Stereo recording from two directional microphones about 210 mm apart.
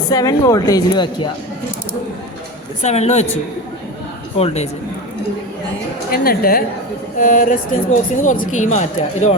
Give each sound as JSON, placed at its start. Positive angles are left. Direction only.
{"t": 0.1, "sound": "speech", "side_deg": 15}
{"t": 2.8, "sound": "speech", "side_deg": 30}
{"t": 4.4, "sound": "speech", "side_deg": 30}
{"t": 6.1, "sound": "a woman's voice", "side_deg": 45}